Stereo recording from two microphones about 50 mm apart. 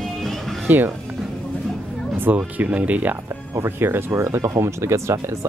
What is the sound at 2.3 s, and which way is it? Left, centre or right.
Speech, right.